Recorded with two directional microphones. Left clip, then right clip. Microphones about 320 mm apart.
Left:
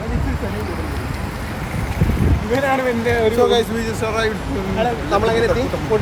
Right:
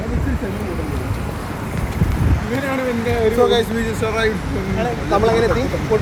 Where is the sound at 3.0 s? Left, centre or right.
Centre.